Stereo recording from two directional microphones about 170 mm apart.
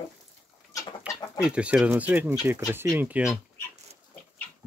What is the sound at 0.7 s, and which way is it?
Chicken, 20° left (ahead or behind).